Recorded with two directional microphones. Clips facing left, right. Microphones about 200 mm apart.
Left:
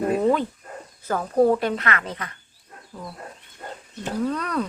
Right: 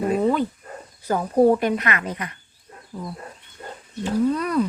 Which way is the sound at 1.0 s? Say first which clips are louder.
Right 2 dB; 15° right (ahead or behind).